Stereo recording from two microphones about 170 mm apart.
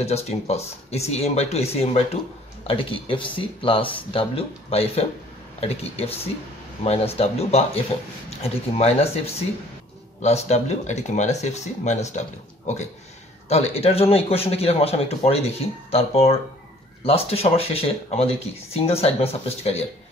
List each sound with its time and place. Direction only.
0.0 s speech: 40° left (ahead or behind)